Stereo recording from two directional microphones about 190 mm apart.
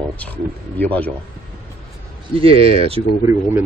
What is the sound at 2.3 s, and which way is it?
Speech, 30° right (ahead or behind).